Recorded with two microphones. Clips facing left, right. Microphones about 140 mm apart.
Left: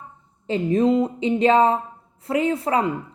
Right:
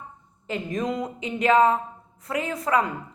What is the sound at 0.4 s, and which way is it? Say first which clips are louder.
A woman's voice: left 9 dB; 30° left (ahead or behind).